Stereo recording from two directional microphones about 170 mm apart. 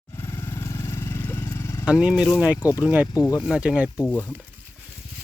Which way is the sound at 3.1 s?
25° left (ahead or behind).